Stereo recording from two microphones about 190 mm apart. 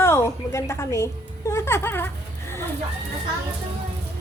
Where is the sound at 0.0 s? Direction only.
15° left (ahead or behind).